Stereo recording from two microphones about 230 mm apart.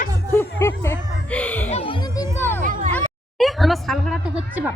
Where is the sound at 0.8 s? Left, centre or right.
Centre.